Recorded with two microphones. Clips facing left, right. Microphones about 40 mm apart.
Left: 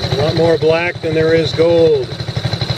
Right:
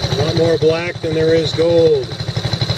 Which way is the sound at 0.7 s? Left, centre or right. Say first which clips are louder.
Left 3 dB; left.